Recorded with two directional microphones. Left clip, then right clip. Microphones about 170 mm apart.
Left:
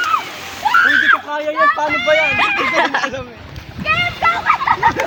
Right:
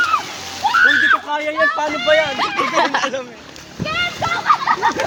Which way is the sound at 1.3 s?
40° left (ahead or behind).